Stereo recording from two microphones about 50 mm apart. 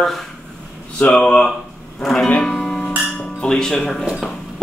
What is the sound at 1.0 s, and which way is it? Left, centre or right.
Speech, centre.